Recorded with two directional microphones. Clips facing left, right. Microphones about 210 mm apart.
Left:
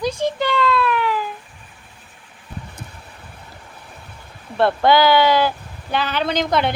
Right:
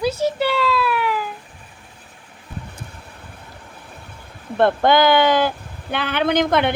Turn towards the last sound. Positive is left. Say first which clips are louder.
# right 2 dB
turn(degrees=-55)  # may be behind; listen again after turning